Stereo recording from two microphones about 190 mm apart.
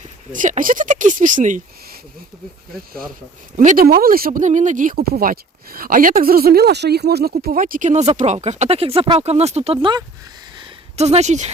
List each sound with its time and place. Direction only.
0.3 s speech: 45° right (ahead or behind)
3.6 s speech: 45° right (ahead or behind)
10.6 s a sound: 35° right (ahead or behind)